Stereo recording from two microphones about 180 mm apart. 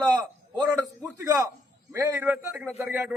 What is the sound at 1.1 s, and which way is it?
A man's voice, 15° right (ahead or behind).